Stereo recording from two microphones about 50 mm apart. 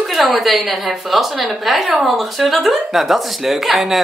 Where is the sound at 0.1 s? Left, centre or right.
Centre.